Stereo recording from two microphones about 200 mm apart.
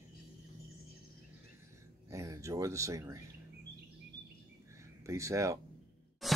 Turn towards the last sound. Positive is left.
turn(degrees=0)  # may be behind; listen again after turning